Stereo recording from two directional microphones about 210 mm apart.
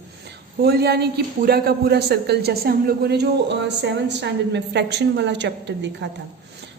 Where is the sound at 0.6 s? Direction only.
50° right (ahead or behind).